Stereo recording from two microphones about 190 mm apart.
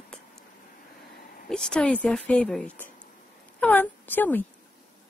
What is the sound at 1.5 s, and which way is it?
A woman's voice, 5° left (ahead or behind).